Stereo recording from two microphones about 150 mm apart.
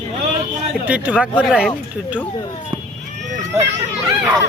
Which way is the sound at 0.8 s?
10° right (ahead or behind).